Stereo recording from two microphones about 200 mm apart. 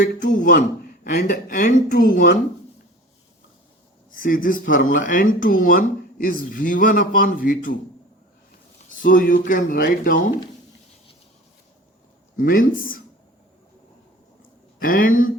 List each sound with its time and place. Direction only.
0.0 s speech: 40° left (ahead or behind)
4.1 s speech: 45° left (ahead or behind)
8.9 s speech: 40° left (ahead or behind)
12.4 s speech: 45° left (ahead or behind)
14.8 s speech: 45° left (ahead or behind)